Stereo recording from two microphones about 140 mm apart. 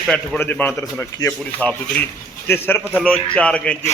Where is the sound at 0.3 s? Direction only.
15° left (ahead or behind).